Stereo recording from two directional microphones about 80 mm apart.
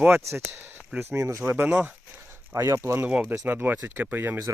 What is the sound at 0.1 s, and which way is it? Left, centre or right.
Speech, right.